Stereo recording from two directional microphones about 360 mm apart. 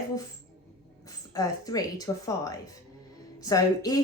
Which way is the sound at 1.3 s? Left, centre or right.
Centre.